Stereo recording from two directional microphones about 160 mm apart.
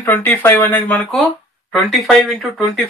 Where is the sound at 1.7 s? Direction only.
Centre (ahead or behind).